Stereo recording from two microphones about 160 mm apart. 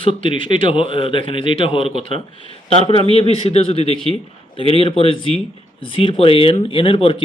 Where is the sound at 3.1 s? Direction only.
35° left (ahead or behind).